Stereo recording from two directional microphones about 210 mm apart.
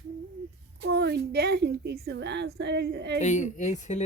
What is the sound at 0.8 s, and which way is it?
A woman's voice, 50° right (ahead or behind).